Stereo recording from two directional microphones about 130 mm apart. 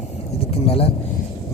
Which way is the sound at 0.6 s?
50° left (ahead or behind).